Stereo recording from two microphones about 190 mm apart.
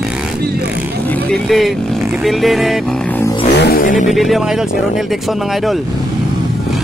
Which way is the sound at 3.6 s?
50° left (ahead or behind).